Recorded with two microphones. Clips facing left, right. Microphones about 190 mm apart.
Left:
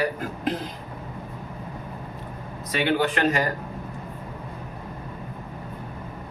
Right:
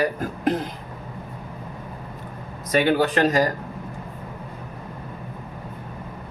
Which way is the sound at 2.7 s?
45° right (ahead or behind).